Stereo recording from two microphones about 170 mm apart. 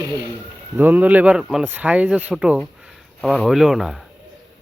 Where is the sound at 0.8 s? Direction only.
10° right (ahead or behind).